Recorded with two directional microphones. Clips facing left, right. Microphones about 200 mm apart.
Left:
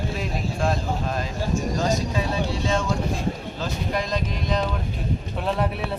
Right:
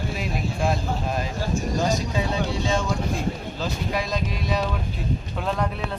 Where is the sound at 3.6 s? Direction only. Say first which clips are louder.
Even; 10° right (ahead or behind).